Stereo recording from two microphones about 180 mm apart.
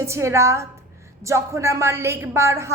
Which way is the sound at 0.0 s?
15° right (ahead or behind).